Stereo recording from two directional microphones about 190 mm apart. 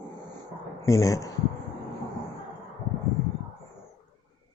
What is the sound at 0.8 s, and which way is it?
Speech, 15° left (ahead or behind).